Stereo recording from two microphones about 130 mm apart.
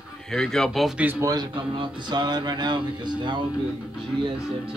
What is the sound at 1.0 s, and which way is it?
Speech, 15° right (ahead or behind).